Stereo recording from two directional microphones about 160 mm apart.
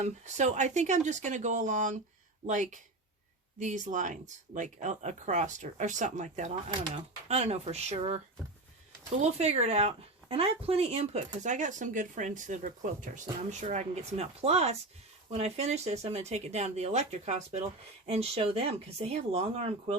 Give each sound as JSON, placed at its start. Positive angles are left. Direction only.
{"t": 0.0, "sound": "speech", "side_deg": -50}
{"t": 6.8, "sound": "speech", "side_deg": -35}
{"t": 9.2, "sound": "speech", "side_deg": -40}